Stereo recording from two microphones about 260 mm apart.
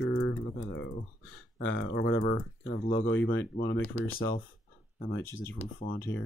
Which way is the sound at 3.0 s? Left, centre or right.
Left.